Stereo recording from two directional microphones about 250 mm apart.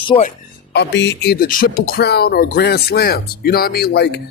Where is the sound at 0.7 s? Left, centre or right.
Left.